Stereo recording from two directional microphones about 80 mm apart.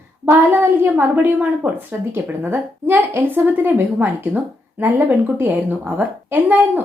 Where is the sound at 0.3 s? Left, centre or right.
Right.